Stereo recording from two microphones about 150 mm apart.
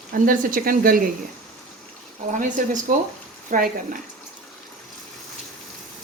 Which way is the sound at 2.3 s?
60° right (ahead or behind).